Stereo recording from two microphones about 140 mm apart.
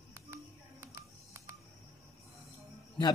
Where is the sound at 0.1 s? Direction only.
20° right (ahead or behind).